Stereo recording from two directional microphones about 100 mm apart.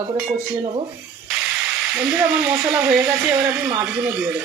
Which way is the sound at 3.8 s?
15° right (ahead or behind).